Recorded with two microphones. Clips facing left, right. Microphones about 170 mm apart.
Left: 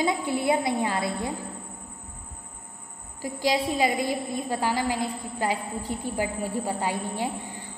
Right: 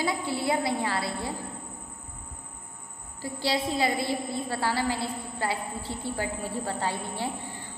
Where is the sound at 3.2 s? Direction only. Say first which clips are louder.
Left 3 dB; 15° left (ahead or behind).